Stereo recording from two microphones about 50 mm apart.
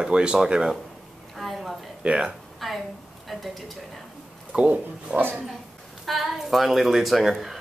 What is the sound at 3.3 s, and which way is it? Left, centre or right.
Speech, centre.